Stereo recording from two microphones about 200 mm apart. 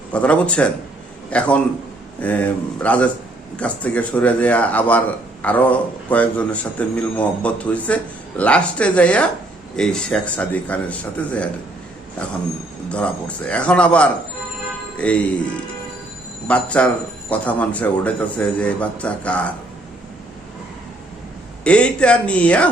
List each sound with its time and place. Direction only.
0.1 s speech: 5° left (ahead or behind)
12.9 s speech: 5° left (ahead or behind)
16.5 s speech: 5° left (ahead or behind)
21.6 s speech: 5° left (ahead or behind)